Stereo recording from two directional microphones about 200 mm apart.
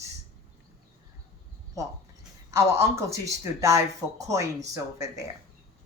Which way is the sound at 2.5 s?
15° right (ahead or behind).